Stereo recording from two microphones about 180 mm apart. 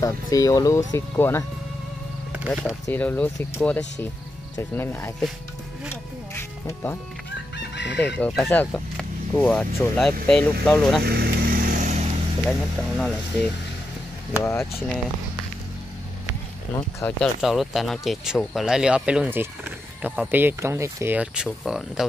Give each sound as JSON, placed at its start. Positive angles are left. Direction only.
{"t": 0.0, "sound": "speech", "side_deg": 20}
{"t": 2.3, "sound": "speech", "side_deg": -5}
{"t": 2.9, "sound": "speech", "side_deg": 10}
{"t": 6.3, "sound": "music", "side_deg": 10}
{"t": 7.5, "sound": "chicken", "side_deg": 75}
{"t": 8.2, "sound": "speech", "side_deg": 5}
{"t": 11.1, "sound": "vehicle", "side_deg": -55}
{"t": 12.4, "sound": "speech", "side_deg": 5}
{"t": 14.3, "sound": "speech", "side_deg": 15}
{"t": 17.2, "sound": "speech", "side_deg": 0}